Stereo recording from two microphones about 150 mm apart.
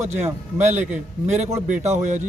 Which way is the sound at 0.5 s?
50° right (ahead or behind).